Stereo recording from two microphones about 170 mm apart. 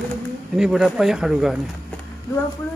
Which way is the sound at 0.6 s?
5° right (ahead or behind).